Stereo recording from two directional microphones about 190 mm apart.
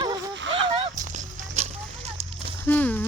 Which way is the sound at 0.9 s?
40° right (ahead or behind).